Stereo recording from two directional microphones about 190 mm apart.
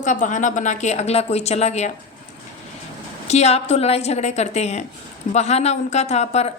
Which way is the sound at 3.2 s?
35° left (ahead or behind).